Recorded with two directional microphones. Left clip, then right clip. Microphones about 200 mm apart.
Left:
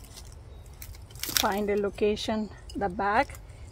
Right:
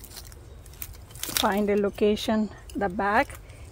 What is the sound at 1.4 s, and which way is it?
Speech, 50° right (ahead or behind).